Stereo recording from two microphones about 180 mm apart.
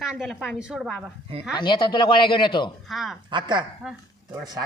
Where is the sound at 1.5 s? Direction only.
25° left (ahead or behind).